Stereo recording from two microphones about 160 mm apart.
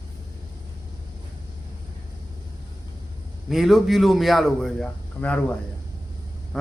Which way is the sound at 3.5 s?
Centre (ahead or behind).